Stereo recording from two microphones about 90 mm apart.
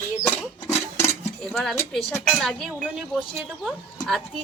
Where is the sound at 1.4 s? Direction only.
5° left (ahead or behind).